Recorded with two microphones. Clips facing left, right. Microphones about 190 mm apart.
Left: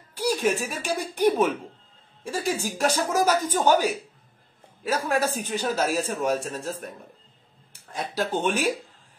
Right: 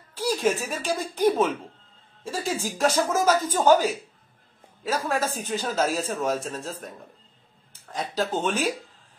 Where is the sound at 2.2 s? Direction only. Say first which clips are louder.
Left 1 dB; 15° left (ahead or behind).